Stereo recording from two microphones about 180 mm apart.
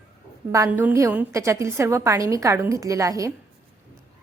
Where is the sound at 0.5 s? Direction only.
15° right (ahead or behind).